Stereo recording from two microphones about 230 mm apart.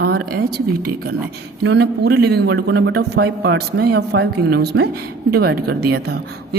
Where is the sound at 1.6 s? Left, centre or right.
Right.